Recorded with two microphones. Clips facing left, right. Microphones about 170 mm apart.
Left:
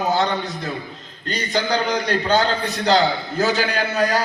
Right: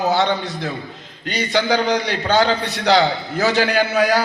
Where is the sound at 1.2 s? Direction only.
80° right.